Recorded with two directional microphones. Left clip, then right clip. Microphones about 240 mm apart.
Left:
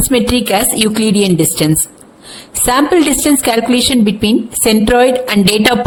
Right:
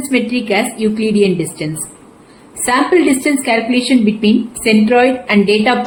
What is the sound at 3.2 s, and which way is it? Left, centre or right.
A woman's voice, left.